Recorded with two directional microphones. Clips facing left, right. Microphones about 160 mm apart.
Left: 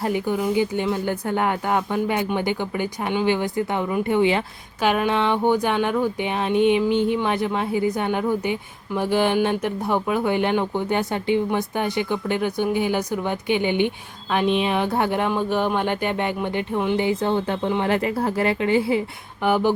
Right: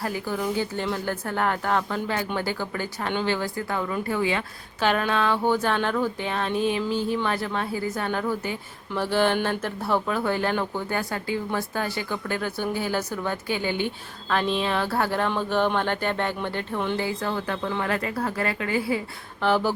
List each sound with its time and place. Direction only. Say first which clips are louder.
0.0 s speech: left 5 dB; 20° left (ahead or behind)
4.8 s speech: left 3 dB; 10° left (ahead or behind)